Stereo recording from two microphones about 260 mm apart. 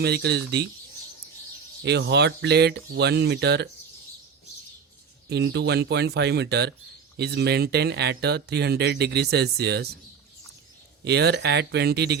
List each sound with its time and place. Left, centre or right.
0.0 s speech: right
1.8 s speech: right
5.3 s speech: right
11.0 s speech: right